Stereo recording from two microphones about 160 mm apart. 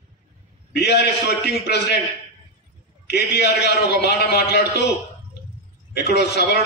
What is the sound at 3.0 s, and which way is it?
A man's voice, 90° left.